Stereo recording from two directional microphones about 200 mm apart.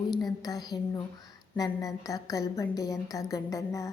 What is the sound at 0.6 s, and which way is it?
A woman's voice, 20° left (ahead or behind).